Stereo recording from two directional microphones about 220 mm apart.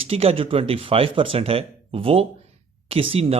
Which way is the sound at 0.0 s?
25° right (ahead or behind).